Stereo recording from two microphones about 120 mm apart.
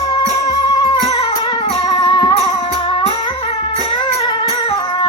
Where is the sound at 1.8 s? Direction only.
35° left (ahead or behind).